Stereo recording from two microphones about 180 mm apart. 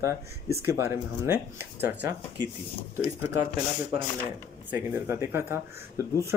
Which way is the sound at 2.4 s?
25° right (ahead or behind).